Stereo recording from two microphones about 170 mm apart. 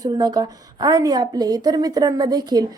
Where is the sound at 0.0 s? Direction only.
20° right (ahead or behind).